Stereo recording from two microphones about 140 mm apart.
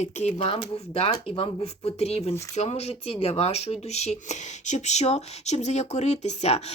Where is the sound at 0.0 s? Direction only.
55° left (ahead or behind).